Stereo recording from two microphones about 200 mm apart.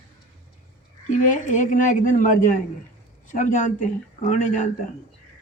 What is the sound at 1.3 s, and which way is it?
Speech, 40° left (ahead or behind).